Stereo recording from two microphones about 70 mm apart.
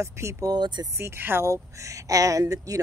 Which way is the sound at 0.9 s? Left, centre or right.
Right.